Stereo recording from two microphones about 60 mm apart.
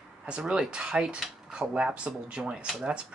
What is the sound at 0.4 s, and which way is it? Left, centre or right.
Speech, centre.